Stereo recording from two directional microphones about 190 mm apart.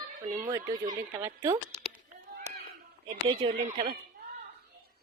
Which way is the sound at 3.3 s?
30° right (ahead or behind).